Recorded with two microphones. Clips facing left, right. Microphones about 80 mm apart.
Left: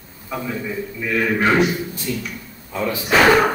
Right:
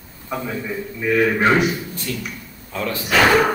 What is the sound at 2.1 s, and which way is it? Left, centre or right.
Speech, centre.